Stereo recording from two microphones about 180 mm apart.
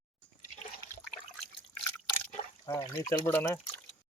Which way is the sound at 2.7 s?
15° left (ahead or behind).